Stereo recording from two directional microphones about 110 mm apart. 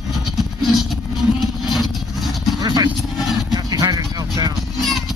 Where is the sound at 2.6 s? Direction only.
35° right (ahead or behind).